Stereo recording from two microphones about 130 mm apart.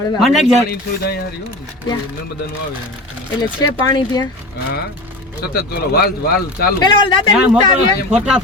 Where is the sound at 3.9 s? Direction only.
30° left (ahead or behind).